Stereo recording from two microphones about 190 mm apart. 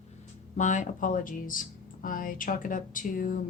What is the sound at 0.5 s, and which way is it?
Speech, 40° left (ahead or behind).